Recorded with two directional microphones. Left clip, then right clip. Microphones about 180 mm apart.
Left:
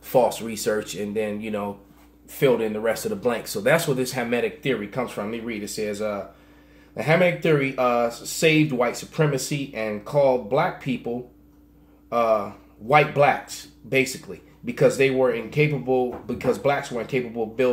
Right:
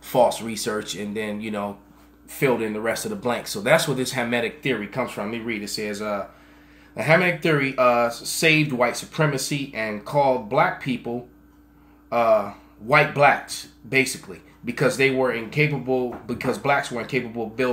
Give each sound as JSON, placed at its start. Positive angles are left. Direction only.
{"t": 0.0, "sound": "speech", "side_deg": -5}
{"t": 12.1, "sound": "speech", "side_deg": 0}